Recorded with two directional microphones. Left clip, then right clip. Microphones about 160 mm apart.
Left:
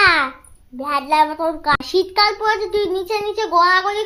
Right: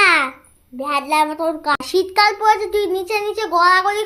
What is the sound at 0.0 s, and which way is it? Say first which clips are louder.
Babbling: even; 15° right (ahead or behind).